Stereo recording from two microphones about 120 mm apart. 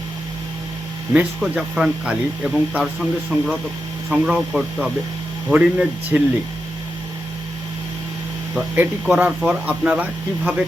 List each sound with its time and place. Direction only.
1.4 s speech: 5° right (ahead or behind)
8.5 s speech: 15° right (ahead or behind)